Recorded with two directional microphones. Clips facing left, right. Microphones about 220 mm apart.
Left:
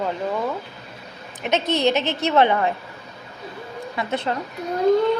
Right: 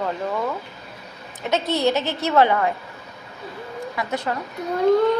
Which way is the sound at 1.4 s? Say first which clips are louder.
Left 1 dB; 20° left (ahead or behind).